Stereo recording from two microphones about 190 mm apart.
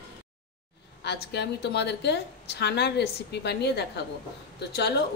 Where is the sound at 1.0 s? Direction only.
65° left (ahead or behind).